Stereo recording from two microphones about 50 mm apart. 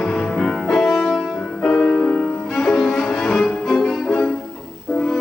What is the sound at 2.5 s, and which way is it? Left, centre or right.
Music, centre.